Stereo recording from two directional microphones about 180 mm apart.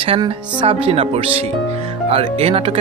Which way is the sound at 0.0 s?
30° right (ahead or behind).